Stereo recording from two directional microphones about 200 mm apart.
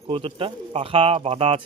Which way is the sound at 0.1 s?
25° right (ahead or behind).